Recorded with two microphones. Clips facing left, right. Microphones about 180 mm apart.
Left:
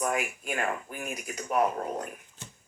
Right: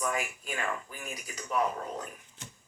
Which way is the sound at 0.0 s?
55° left (ahead or behind).